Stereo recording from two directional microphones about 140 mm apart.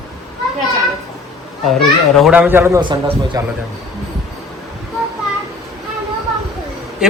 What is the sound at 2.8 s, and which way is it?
Speech, 35° right (ahead or behind).